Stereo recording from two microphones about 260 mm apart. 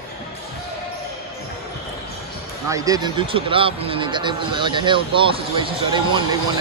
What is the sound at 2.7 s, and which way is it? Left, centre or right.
Speech, centre.